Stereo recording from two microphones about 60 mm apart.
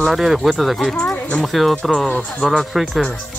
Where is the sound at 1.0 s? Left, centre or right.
Centre.